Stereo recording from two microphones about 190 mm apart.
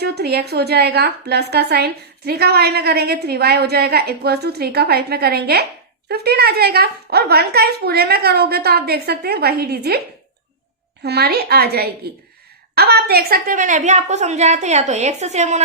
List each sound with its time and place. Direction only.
0.0 s a woman's voice: 60° right (ahead or behind)
11.0 s a woman's voice: 60° right (ahead or behind); by 15.6 s 35° right (ahead or behind)